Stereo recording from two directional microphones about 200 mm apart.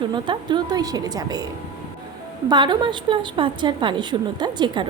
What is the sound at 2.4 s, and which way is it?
A woman's voice, 20° right (ahead or behind).